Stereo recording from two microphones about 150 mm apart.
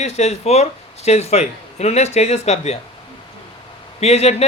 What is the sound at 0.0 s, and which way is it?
A man's voice, 45° left (ahead or behind).